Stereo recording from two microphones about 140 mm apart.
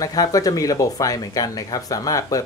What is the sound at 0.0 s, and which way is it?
Speech, 25° left (ahead or behind).